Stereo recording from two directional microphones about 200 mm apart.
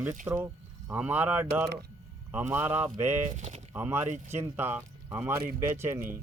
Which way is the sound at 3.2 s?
35° right (ahead or behind).